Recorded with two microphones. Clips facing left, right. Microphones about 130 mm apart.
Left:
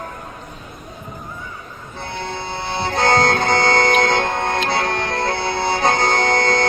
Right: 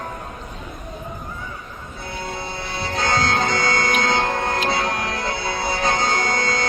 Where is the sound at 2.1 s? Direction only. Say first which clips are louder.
Left 3 dB; 25° left (ahead or behind).